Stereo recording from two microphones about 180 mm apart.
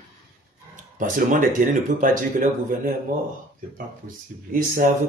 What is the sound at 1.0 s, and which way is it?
Speech, 45° right (ahead or behind).